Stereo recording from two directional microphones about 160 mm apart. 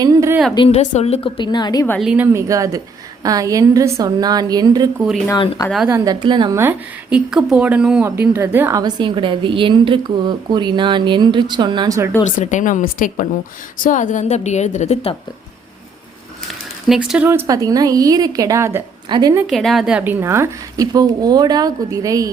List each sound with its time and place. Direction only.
0.0 s speech: 20° right (ahead or behind)
0.5 s speech: 30° left (ahead or behind)
0.8 s speech: 40° left (ahead or behind); by 1.9 s 25° left (ahead or behind)
2.0 s a woman's voice: 5° right (ahead or behind); by 4.9 s 25° right (ahead or behind)
5.9 s a woman's voice: 25° right (ahead or behind)
6.6 s a woman's voice: 10° right (ahead or behind); by 11.9 s 30° right (ahead or behind)
12.2 s a woman's voice: 50° left (ahead or behind)
16.5 s a sound: centre (ahead or behind)
17.2 s a woman's voice: 20° right (ahead or behind)
19.0 s a woman's voice: 30° right (ahead or behind)
19.5 s a woman's voice: centre (ahead or behind); by 22.3 s 20° right (ahead or behind)